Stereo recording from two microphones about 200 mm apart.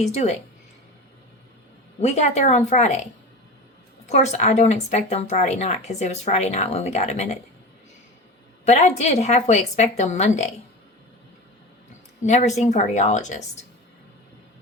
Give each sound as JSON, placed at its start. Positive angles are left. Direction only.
{"t": 0.0, "sound": "a woman's voice", "side_deg": 35}
{"t": 2.0, "sound": "a woman's voice", "side_deg": 35}
{"t": 4.1, "sound": "a woman's voice", "side_deg": 35}
{"t": 8.6, "sound": "a woman's voice", "side_deg": 35}
{"t": 12.2, "sound": "a woman's voice", "side_deg": 35}